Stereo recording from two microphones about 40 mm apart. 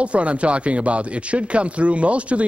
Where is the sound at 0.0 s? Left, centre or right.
Right.